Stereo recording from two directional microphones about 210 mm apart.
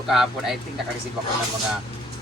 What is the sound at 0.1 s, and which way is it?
Speech, centre (ahead or behind).